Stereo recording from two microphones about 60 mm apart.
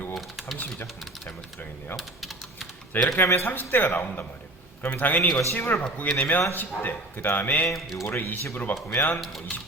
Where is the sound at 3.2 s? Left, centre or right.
Left.